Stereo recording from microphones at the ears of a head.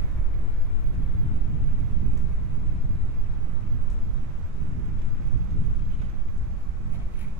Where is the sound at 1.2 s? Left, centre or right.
Right.